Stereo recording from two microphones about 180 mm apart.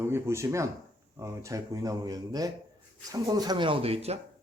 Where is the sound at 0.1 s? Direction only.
15° right (ahead or behind).